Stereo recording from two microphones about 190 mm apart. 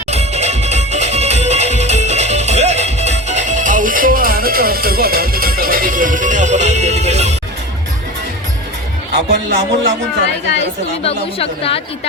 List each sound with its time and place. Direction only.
0.1 s music: 35° right (ahead or behind)
9.1 s a man's voice: 65° right (ahead or behind)
10.4 s a woman's voice: 65° left (ahead or behind)
11.0 s a woman's voice: 30° left (ahead or behind)